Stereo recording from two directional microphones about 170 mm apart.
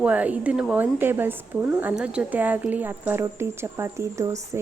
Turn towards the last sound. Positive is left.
turn(degrees=-20)  # may be behind; listen again after turning